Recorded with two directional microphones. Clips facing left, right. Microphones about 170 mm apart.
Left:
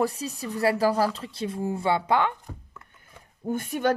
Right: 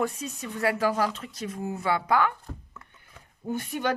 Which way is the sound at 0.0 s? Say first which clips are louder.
Left 3 dB; 35° left (ahead or behind).